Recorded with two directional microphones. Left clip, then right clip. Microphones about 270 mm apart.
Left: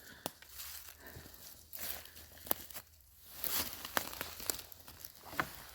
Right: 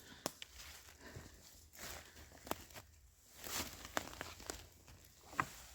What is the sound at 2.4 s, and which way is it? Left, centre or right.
Tearing, left.